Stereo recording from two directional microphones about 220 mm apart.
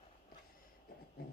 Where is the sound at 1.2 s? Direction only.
45° left (ahead or behind).